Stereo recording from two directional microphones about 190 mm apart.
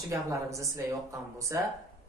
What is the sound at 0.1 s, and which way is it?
A woman's voice, 15° right (ahead or behind).